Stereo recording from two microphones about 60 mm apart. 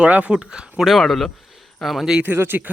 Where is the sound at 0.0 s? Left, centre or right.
Right.